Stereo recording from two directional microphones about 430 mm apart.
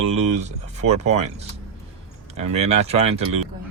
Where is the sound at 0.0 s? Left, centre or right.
Centre.